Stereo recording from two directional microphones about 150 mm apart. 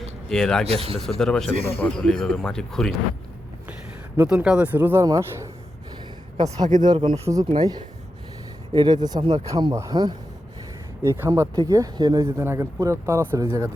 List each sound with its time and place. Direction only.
0.3 s speech: 5° left (ahead or behind)
0.6 s speech: 40° right (ahead or behind)
1.2 s speech: 5° left (ahead or behind)
4.2 s speech: 5° right (ahead or behind)
5.0 s speech: 25° right (ahead or behind)
6.8 s speech: 30° right (ahead or behind)